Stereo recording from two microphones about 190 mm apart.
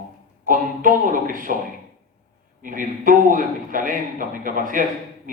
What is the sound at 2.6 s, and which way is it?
A man's voice, 45° right (ahead or behind).